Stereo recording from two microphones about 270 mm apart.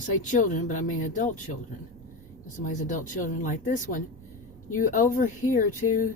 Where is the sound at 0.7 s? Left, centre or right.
Left.